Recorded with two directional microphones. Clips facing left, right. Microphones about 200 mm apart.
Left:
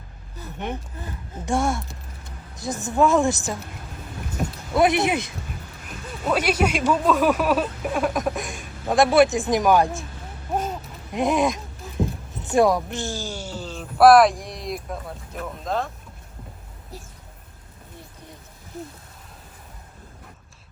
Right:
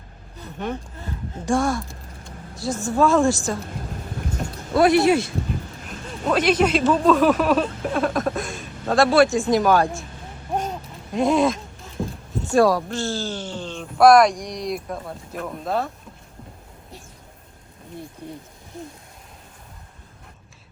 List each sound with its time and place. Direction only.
1.5 s a woman's voice: 25° left (ahead or behind)
4.8 s a woman's voice: 20° left (ahead or behind)
9.8 s speech: centre (ahead or behind)
11.1 s speech: 20° left (ahead or behind); by 15.9 s 5° right (ahead or behind)
18.2 s owl: 10° right (ahead or behind)